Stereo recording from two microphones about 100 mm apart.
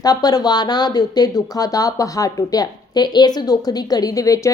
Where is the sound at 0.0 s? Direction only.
40° left (ahead or behind).